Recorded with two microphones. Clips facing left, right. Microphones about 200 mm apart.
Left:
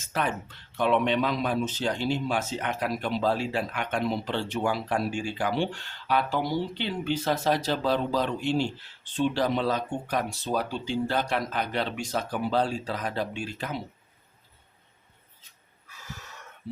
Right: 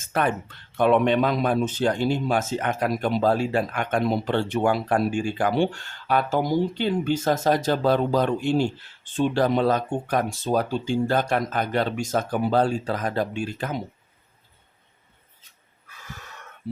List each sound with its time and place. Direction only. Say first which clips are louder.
0.0 s a man's voice: right 5 dB; 55° right (ahead or behind)
15.9 s snort: right 1 dB; 55° right (ahead or behind)